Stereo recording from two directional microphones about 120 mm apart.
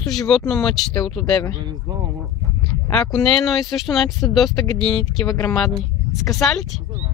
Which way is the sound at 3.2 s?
Centre (ahead or behind).